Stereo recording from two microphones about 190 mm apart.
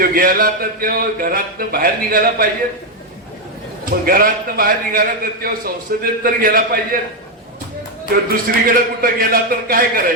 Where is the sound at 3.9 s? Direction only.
50° right (ahead or behind).